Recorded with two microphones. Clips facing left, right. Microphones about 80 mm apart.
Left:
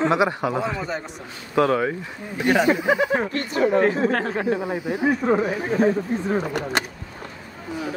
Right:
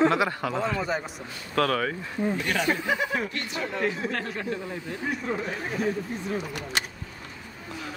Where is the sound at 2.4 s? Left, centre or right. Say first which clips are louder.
Left 8 dB; left.